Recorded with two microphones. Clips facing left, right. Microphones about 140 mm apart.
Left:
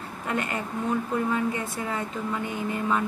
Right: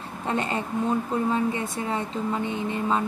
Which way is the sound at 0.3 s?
25° right (ahead or behind).